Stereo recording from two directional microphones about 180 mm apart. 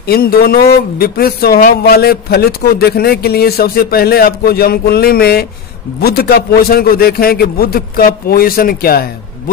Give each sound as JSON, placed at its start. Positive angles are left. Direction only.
{"t": 0.0, "sound": "speech", "side_deg": 60}